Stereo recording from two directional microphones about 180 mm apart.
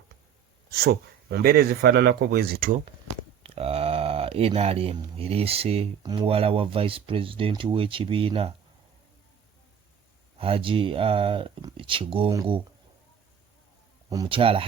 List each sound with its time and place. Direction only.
0.7 s a man's voice: 60° right (ahead or behind)
3.4 s speech: 35° right (ahead or behind)
10.3 s speech: 30° right (ahead or behind)
14.1 s speech: 25° right (ahead or behind)